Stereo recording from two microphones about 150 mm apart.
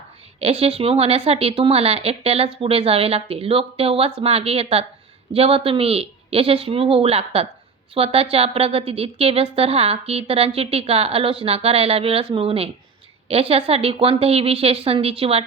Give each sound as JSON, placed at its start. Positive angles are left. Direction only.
{"t": 0.3, "sound": "a woman's voice", "side_deg": -40}